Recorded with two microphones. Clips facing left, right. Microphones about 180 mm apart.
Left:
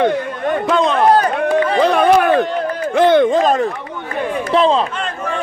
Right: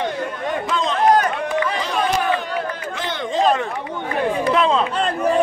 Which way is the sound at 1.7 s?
60° left (ahead or behind).